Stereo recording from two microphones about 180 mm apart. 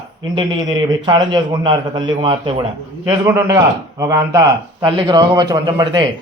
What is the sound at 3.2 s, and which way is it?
A man's voice, 15° right (ahead or behind).